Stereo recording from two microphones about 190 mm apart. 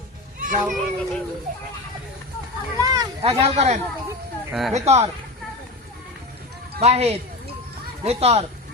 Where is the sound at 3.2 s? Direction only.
35° right (ahead or behind).